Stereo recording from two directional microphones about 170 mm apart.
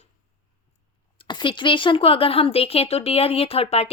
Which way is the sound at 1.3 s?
30° left (ahead or behind).